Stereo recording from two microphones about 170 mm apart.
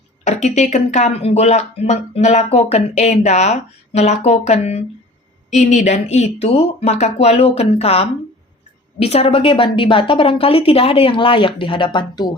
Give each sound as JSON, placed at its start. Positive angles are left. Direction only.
{"t": 0.3, "sound": "speech", "side_deg": 45}